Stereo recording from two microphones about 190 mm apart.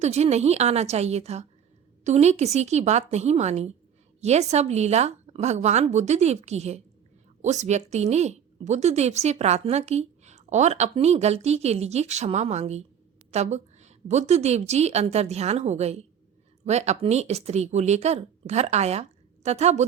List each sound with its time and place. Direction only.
0.0 s a woman's voice: 35° right (ahead or behind)